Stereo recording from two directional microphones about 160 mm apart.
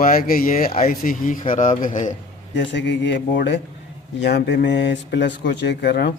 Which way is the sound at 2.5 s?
90° left.